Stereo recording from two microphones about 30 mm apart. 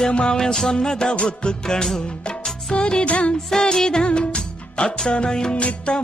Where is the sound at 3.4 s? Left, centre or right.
Centre.